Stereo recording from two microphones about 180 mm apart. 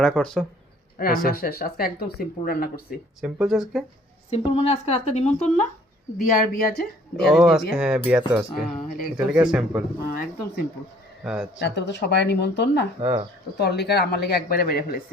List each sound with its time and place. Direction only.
0.0 s speech: 5° left (ahead or behind)
1.0 s speech: 55° left (ahead or behind)
3.2 s speech: 5° right (ahead or behind)
4.3 s speech: 35° left (ahead or behind)
6.1 s speech: 50° left (ahead or behind)
7.2 s speech: centre (ahead or behind)
8.9 s speech: 50° left (ahead or behind)
9.1 s speech: 5° right (ahead or behind)
10.2 s speech: 55° left (ahead or behind)
11.2 s speech: centre (ahead or behind)
11.6 s speech: 70° left (ahead or behind)
13.0 s speech: 35° right (ahead or behind)
13.6 s speech: 65° left (ahead or behind)